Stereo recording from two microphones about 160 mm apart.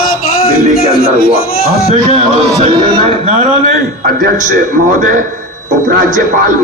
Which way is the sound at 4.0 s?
60° right (ahead or behind).